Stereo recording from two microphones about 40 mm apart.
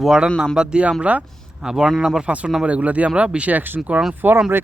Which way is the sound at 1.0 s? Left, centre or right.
Right.